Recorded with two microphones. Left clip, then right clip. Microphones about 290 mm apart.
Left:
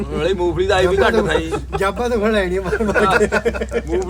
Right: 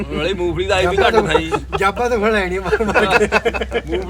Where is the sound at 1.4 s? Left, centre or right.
Centre.